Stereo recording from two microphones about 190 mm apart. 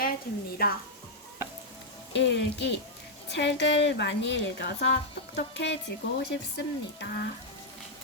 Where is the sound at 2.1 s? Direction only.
65° left (ahead or behind).